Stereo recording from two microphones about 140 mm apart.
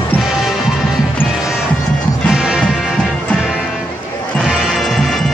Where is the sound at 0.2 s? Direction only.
Centre (ahead or behind).